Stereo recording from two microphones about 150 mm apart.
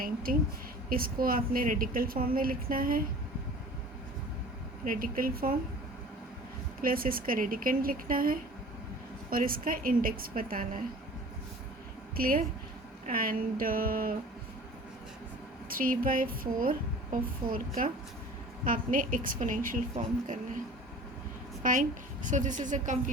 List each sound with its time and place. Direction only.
0.0 s a sound: 75° right (ahead or behind)
0.9 s a woman's voice: 75° right (ahead or behind)
4.9 s a woman's voice: 70° right (ahead or behind)
6.8 s a woman's voice: 70° right (ahead or behind)
12.1 s a woman's voice: 75° right (ahead or behind)
15.7 s a woman's voice: 70° right (ahead or behind)
18.6 s a woman's voice: 65° right (ahead or behind)
21.6 s a woman's voice: 60° right (ahead or behind)